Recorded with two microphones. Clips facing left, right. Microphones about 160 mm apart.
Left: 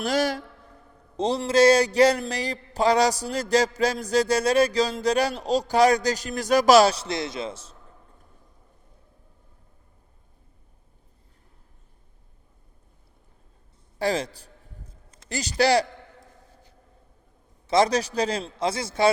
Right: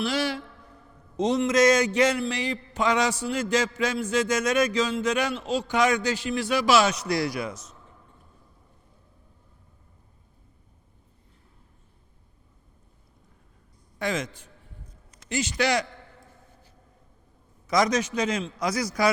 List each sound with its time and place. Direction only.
0.0 s a woman's voice: 40° left (ahead or behind)
14.0 s a man's voice: 35° left (ahead or behind)
15.1 s a sound: 35° left (ahead or behind)
17.7 s a man's voice: 30° left (ahead or behind)